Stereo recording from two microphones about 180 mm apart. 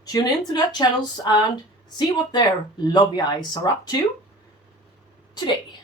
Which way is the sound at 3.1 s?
25° left (ahead or behind).